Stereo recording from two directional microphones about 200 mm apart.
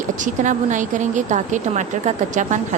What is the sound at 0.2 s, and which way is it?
A woman's voice, 40° right (ahead or behind).